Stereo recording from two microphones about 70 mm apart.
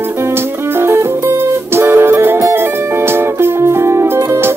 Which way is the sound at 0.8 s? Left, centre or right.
Right.